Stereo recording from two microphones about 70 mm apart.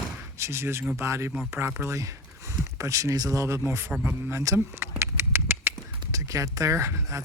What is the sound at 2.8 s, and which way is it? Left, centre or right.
Speech, right.